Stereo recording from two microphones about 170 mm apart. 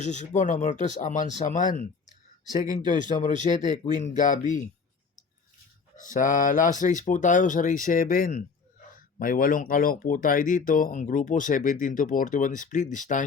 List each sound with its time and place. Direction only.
0.0 s speech: 45° left (ahead or behind)
6.0 s speech: 50° left (ahead or behind)